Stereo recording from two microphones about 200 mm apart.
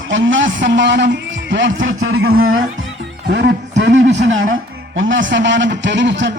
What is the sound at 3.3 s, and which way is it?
Speech, 55° right (ahead or behind).